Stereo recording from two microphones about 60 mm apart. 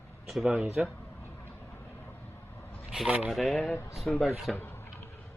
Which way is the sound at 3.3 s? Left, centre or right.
Centre.